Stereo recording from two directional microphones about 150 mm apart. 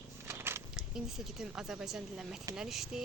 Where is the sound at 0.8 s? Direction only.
5° right (ahead or behind).